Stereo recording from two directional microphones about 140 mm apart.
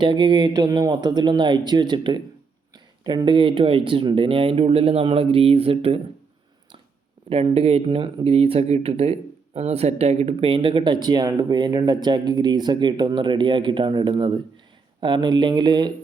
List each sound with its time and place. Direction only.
0.0 s speech: 35° right (ahead or behind)
7.3 s speech: 40° right (ahead or behind)